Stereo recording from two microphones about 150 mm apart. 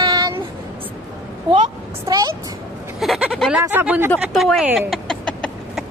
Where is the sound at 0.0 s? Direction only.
25° right (ahead or behind).